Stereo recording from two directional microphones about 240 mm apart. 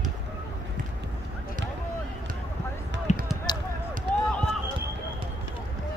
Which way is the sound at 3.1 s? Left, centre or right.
Left.